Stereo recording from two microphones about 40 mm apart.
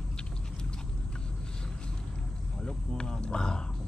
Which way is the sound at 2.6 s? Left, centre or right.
Centre.